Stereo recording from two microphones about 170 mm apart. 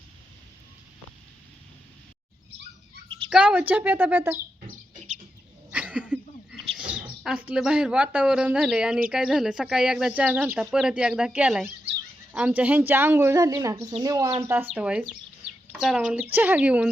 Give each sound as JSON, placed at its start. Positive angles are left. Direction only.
{"t": 3.2, "sound": "speech", "side_deg": -10}
{"t": 5.7, "sound": "a sound", "side_deg": -10}
{"t": 6.7, "sound": "speech", "side_deg": -5}